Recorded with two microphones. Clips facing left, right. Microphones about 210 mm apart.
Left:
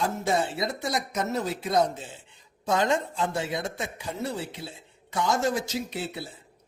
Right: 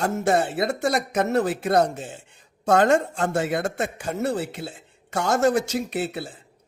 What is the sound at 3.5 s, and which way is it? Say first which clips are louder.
Speech: right 6 dB; 70° right (ahead or behind).